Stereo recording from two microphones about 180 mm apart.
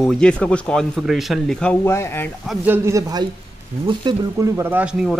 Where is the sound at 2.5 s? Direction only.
10° right (ahead or behind).